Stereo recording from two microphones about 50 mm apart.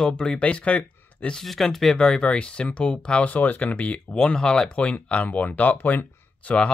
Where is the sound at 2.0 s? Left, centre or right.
Centre.